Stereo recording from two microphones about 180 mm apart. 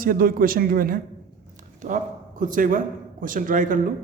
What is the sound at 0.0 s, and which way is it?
A man's voice, 50° right (ahead or behind).